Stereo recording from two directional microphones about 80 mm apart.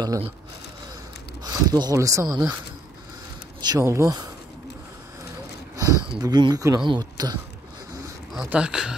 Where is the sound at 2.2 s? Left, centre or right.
Right.